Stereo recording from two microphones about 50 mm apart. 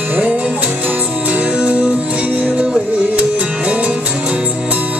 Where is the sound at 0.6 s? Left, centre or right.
Right.